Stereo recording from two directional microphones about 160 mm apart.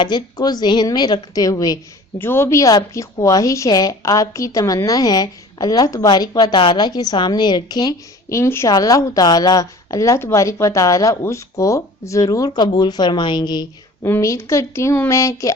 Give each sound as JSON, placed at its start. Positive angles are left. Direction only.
{"t": 0.0, "sound": "a woman's voice", "side_deg": 25}
{"t": 14.0, "sound": "speech", "side_deg": 15}